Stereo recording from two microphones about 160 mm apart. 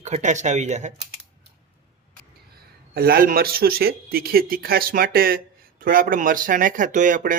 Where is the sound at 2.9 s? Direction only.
65° right (ahead or behind).